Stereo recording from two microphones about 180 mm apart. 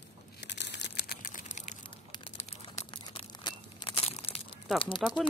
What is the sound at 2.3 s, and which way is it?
Crumpling, 35° left (ahead or behind).